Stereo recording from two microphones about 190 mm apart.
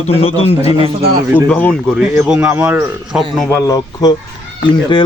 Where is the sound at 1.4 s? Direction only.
5° left (ahead or behind).